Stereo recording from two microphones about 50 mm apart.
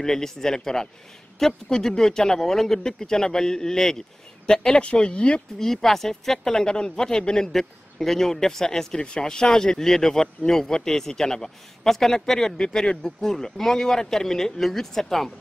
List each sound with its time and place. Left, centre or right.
0.0 s speech: centre
5.6 s speech: centre